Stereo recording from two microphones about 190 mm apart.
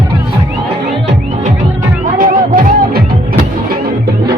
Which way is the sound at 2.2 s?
50° right (ahead or behind).